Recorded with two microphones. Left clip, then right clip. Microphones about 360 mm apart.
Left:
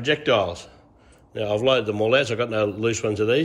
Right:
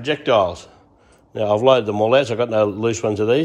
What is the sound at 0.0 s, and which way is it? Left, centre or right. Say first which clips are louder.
A man's voice: right 4 dB; centre.